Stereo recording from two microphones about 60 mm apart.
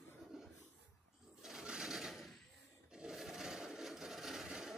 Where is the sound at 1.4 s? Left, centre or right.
Centre.